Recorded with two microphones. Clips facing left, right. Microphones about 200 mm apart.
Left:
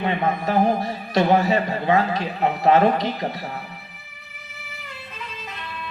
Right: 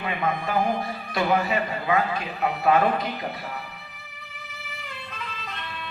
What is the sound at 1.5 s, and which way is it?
A man's voice, 30° left (ahead or behind).